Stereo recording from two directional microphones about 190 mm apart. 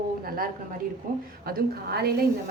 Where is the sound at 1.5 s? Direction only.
55° right (ahead or behind).